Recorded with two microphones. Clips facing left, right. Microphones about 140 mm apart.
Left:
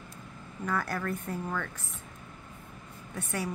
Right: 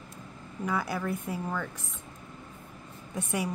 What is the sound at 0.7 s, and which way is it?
A woman's voice, 10° right (ahead or behind).